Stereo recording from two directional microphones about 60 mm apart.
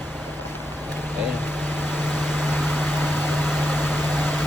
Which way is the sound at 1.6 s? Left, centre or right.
Left.